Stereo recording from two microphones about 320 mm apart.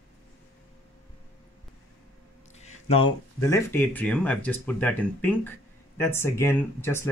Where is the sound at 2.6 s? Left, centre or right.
Centre.